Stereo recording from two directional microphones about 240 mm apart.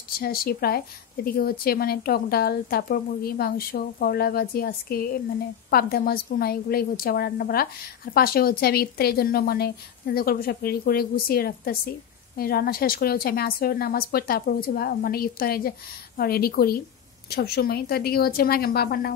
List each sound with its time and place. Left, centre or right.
0.2 s a woman's voice: left